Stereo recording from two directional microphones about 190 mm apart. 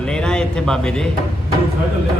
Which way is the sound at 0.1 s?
5° left (ahead or behind).